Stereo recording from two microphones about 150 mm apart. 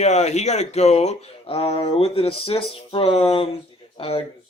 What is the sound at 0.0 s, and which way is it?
A man's voice, 50° left (ahead or behind).